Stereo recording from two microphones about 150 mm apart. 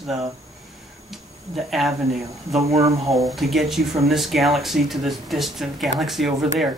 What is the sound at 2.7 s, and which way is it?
Speech, 20° right (ahead or behind).